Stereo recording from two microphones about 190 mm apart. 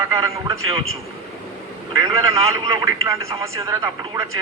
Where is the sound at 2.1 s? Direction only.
15° right (ahead or behind).